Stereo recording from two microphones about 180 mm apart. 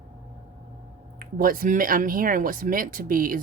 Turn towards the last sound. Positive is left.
turn(degrees=-50)  # may be behind; listen again after turning